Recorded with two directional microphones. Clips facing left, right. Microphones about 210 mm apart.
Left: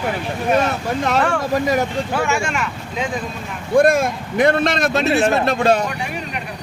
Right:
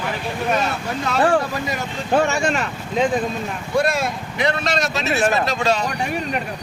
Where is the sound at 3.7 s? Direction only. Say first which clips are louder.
Left 6 dB; 50° left (ahead or behind).